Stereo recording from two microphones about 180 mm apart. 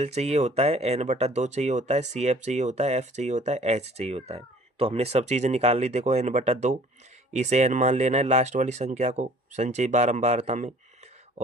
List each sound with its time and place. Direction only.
0.0 s speech: 35° right (ahead or behind)